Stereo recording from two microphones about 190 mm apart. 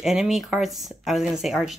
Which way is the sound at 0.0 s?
Centre (ahead or behind).